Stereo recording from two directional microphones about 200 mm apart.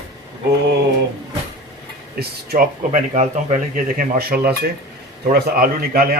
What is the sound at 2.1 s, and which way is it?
Speech, 50° right (ahead or behind).